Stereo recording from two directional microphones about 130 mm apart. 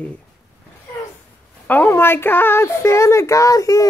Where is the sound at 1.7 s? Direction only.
15° left (ahead or behind).